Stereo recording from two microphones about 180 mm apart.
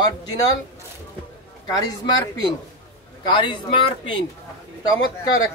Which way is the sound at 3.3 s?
25° left (ahead or behind).